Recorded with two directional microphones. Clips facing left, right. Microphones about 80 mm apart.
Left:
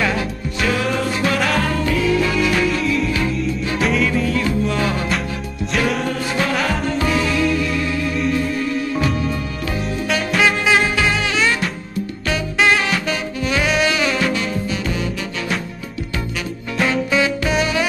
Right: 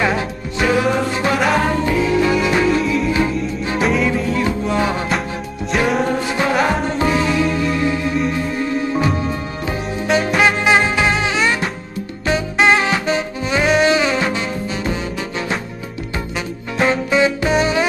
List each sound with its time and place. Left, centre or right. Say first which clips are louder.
0.0 s music: right 2 dB; right
3.8 s music: right 2 dB; centre
4.1 s music: right 1 dB; right
6.0 s music: right 2 dB; right